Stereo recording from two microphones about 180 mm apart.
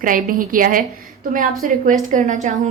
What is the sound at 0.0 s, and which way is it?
A woman's voice, 50° right (ahead or behind).